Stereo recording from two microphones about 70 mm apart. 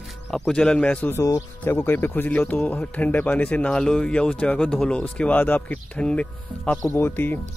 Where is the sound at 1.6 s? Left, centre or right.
Left.